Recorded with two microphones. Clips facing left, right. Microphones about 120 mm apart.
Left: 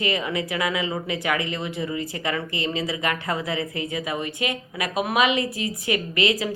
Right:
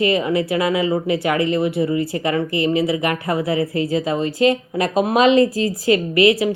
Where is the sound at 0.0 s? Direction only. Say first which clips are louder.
Right 8 dB; 25° right (ahead or behind).